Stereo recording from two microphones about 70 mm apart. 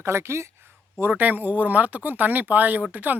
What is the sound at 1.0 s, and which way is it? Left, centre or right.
Speech, right.